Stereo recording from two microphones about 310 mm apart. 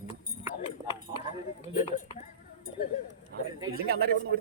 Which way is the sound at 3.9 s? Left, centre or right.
Right.